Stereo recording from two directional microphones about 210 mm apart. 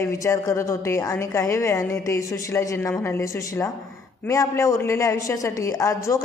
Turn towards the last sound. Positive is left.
turn(degrees=15)  # may be behind; listen again after turning